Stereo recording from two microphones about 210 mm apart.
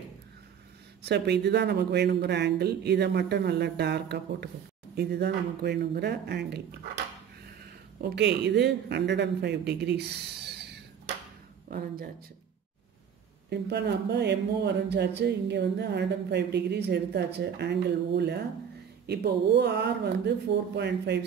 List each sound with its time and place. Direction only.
1.0 s speech: 55° right (ahead or behind)
8.0 s speech: 55° right (ahead or behind)
11.7 s speech: 45° right (ahead or behind)
13.5 s speech: 55° right (ahead or behind)